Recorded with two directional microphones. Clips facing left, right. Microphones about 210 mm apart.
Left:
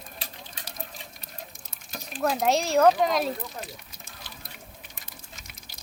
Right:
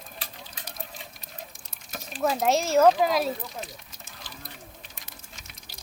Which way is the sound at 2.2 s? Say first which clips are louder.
Even; centre (ahead or behind).